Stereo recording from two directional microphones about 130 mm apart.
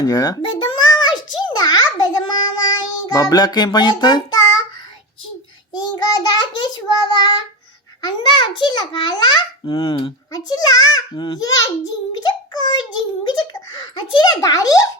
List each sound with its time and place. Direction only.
0.0 s a sound: 30° left (ahead or behind)
2.6 s child singing: 30° left (ahead or behind)
5.7 s child singing: 35° left (ahead or behind)
8.0 s a child's voice: 40° left (ahead or behind)
9.9 s a child's voice: 30° left (ahead or behind)